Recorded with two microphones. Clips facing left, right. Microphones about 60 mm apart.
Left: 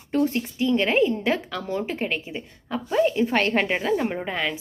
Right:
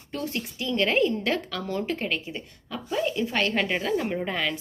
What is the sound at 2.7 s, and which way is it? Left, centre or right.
A woman's voice, left.